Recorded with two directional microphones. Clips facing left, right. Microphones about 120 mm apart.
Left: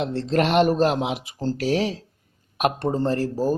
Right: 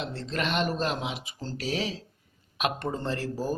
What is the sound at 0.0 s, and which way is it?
Speech, 65° left (ahead or behind).